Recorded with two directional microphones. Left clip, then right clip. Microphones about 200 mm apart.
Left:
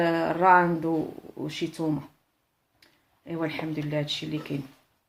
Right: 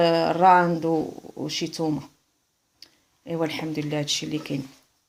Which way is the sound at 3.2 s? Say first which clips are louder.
Right 4 dB; 45° right (ahead or behind).